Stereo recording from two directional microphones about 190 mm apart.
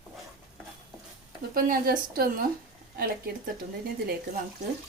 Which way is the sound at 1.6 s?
50° right (ahead or behind).